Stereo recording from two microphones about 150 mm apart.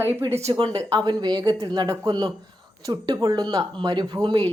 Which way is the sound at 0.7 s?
25° right (ahead or behind).